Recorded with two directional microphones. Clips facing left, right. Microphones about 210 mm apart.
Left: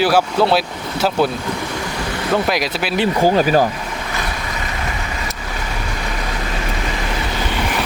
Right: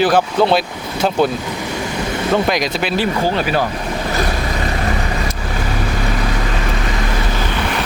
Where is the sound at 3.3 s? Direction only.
40° left (ahead or behind).